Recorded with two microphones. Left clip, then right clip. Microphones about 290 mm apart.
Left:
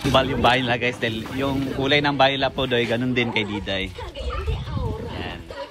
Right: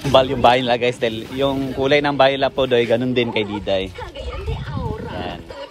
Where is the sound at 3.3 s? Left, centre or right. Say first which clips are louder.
Right 4 dB; centre.